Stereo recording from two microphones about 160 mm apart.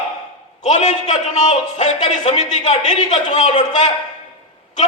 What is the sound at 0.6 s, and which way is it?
A man's voice, 45° left (ahead or behind).